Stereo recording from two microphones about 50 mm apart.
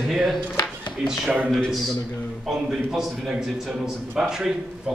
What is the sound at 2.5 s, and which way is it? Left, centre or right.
A man's voice, centre.